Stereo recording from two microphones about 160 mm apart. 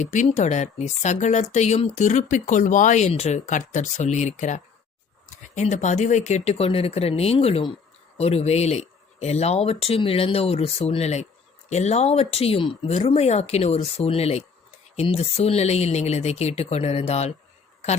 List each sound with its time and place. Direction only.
0.0 s speech: 50° left (ahead or behind)